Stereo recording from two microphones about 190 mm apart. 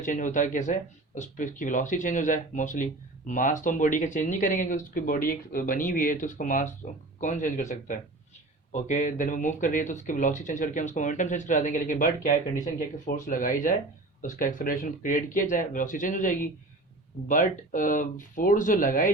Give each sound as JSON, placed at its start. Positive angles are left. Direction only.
{"t": 0.0, "sound": "speech", "side_deg": 40}